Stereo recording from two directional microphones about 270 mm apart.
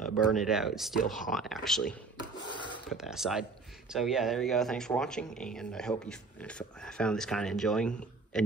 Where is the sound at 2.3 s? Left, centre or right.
Centre.